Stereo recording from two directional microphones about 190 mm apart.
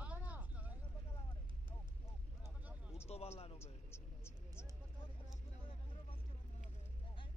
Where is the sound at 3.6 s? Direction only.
15° left (ahead or behind).